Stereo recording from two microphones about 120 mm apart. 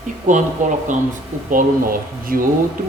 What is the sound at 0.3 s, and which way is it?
Speech, 90° right.